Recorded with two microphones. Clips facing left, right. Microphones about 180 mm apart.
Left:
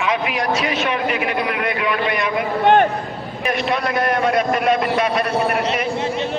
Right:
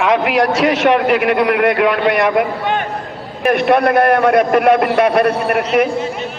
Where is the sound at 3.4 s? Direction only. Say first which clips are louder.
Right 9 dB; 60° right (ahead or behind).